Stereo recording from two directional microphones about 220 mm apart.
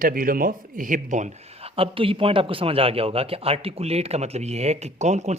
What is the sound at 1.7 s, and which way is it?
A man's voice, 25° right (ahead or behind).